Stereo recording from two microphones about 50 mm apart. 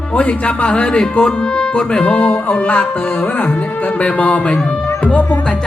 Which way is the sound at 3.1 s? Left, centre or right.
Left.